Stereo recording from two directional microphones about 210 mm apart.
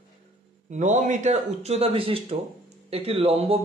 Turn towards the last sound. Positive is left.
turn(degrees=-30)  # may be behind; listen again after turning